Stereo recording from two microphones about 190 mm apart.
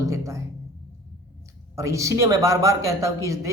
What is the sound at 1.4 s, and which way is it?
A woman's voice, 15° right (ahead or behind).